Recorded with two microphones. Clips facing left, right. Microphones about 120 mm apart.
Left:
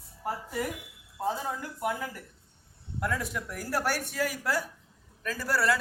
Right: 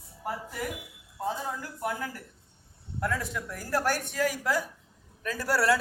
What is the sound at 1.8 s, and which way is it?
A woman's voice, 10° left (ahead or behind).